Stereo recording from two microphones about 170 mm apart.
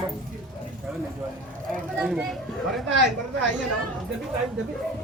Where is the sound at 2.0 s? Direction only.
Centre (ahead or behind).